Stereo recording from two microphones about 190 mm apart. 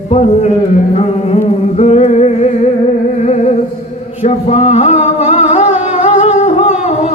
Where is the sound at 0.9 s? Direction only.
35° left (ahead or behind).